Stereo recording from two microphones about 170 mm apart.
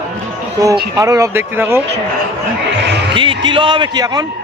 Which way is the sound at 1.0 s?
20° right (ahead or behind).